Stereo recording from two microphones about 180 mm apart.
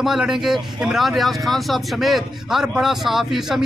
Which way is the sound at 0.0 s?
Centre (ahead or behind).